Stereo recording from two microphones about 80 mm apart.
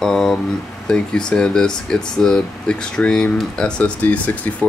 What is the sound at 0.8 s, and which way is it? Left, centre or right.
Speech, centre.